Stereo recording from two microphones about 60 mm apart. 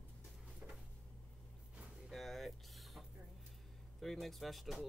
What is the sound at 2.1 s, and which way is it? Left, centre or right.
Vehicle, centre.